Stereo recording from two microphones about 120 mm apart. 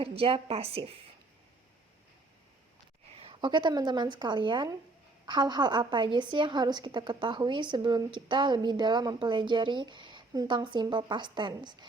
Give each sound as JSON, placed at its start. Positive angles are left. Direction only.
{"t": 0.0, "sound": "a woman's voice", "side_deg": -50}
{"t": 3.2, "sound": "a woman's voice", "side_deg": -45}